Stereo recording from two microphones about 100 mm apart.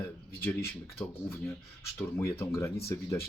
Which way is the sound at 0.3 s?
20° left (ahead or behind).